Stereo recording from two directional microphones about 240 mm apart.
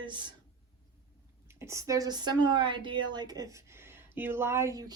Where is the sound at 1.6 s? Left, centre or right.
Centre.